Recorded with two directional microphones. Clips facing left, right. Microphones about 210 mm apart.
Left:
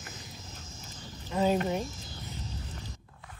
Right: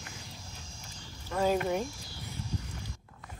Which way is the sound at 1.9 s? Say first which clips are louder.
Left 1 dB; 20° left (ahead or behind).